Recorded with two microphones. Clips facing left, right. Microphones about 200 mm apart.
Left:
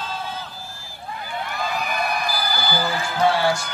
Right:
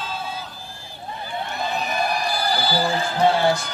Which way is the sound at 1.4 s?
25° right (ahead or behind).